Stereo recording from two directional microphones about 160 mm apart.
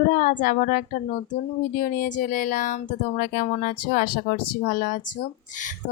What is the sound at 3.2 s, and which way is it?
Speech, 65° left (ahead or behind).